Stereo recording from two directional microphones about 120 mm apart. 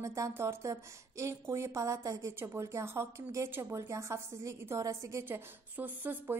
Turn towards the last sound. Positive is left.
turn(degrees=-15)  # may be behind; listen again after turning